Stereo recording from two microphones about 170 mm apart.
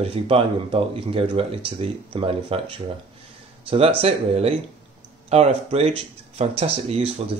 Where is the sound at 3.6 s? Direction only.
35° right (ahead or behind).